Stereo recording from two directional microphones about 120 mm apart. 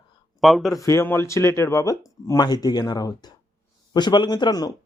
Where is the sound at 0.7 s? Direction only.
25° left (ahead or behind).